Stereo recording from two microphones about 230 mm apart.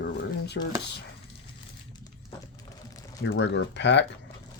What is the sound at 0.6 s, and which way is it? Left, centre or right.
Speech, left.